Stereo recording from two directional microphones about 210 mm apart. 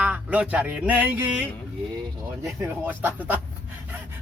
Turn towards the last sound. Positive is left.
turn(degrees=-10)  # may be behind; listen again after turning